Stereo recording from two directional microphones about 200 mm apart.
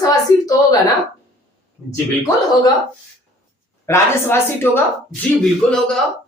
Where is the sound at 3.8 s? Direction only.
10° left (ahead or behind).